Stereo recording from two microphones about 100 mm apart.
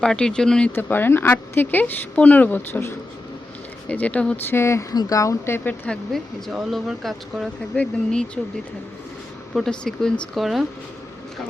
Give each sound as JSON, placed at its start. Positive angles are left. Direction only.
{"t": 0.0, "sound": "speech", "side_deg": 5}
{"t": 0.8, "sound": "speech", "side_deg": 20}
{"t": 4.4, "sound": "speech", "side_deg": 25}
{"t": 6.1, "sound": "speech", "side_deg": 0}
{"t": 7.7, "sound": "speech", "side_deg": 15}
{"t": 9.6, "sound": "speech", "side_deg": 5}